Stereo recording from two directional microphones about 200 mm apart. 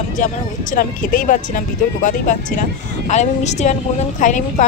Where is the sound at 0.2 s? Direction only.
40° left (ahead or behind).